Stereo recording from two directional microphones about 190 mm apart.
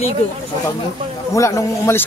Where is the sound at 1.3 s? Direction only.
15° left (ahead or behind).